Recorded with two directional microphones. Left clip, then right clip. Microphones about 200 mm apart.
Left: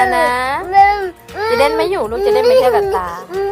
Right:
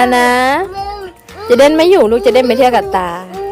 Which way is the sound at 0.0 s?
45° right (ahead or behind).